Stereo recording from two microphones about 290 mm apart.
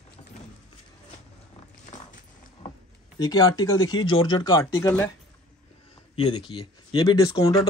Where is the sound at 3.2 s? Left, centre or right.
Centre.